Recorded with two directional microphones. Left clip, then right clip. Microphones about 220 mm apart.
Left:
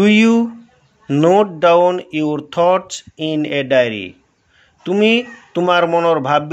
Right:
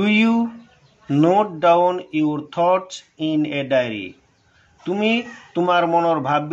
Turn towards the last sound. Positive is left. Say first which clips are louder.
# left 4 dB
turn(degrees=40)  # may be behind; listen again after turning